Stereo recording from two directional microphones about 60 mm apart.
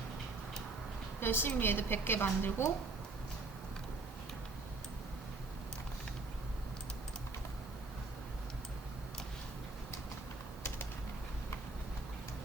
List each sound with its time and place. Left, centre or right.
1.2 s a woman's voice: left